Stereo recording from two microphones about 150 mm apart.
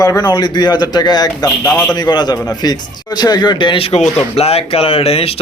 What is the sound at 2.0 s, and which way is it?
A man's voice, 25° left (ahead or behind).